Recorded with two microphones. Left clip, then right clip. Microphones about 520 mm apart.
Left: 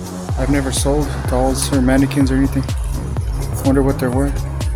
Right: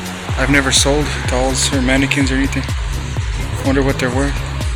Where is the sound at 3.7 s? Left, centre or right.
Left.